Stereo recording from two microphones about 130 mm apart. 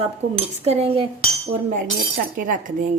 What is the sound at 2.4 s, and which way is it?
Cutlery, 90° right.